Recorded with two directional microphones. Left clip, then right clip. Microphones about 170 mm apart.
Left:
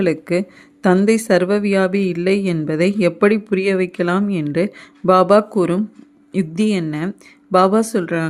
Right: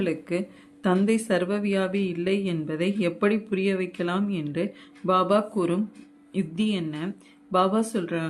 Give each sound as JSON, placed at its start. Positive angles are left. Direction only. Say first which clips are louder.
{"t": 0.0, "sound": "speech", "louder": "left 9 dB", "side_deg": 40}